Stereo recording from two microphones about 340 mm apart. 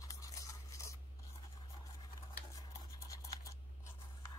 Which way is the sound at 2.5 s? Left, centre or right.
Centre.